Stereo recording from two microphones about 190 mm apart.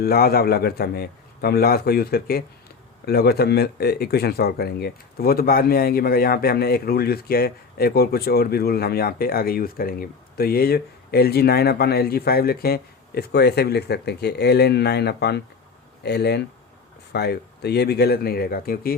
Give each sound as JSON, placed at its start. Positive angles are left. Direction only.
{"t": 0.0, "sound": "speech", "side_deg": 55}